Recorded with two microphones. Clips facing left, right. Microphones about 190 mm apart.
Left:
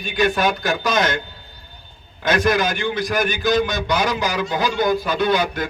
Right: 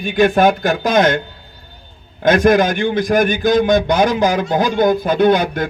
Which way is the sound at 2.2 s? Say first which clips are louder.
Right 7 dB; 50° right (ahead or behind).